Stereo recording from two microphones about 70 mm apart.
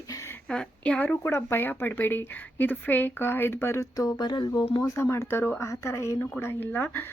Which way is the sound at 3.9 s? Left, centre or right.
Left.